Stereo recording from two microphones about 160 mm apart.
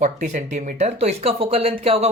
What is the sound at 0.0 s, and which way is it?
Speech, 50° right (ahead or behind).